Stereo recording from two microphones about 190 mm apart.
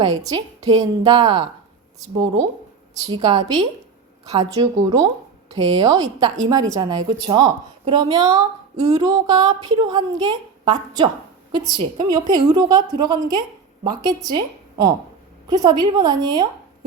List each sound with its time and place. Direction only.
0.0 s a woman's voice: 20° right (ahead or behind)
2.2 s speech: 35° right (ahead or behind)
3.0 s a woman's voice: 20° right (ahead or behind)